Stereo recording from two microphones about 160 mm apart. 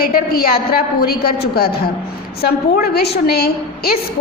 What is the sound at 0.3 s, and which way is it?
A woman's voice, 70° left (ahead or behind).